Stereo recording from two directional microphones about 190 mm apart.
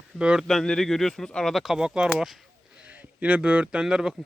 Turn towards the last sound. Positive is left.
turn(degrees=-5)  # may be behind; listen again after turning